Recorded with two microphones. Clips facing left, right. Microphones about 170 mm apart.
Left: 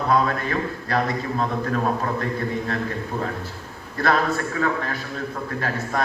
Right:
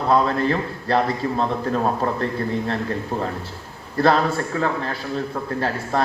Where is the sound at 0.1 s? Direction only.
30° right (ahead or behind).